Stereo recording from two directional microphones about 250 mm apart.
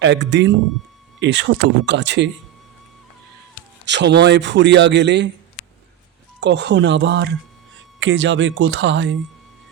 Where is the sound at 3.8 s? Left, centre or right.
Right.